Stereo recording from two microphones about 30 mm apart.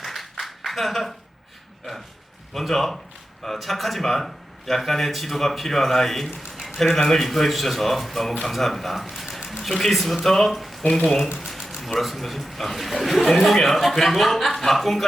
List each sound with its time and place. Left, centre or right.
0.0 s clapping: centre
2.5 s a man's voice: centre
9.6 s a man's voice: centre
10.8 s speech: left
11.3 s a sound: centre
11.9 s a man's voice: centre